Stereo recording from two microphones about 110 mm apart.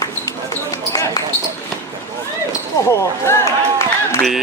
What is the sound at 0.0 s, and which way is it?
Basketball bounce, 30° left (ahead or behind).